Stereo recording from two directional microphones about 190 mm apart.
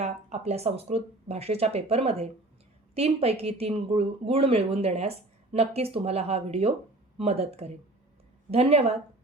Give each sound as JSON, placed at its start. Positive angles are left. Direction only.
{"t": 0.0, "sound": "speech", "side_deg": -35}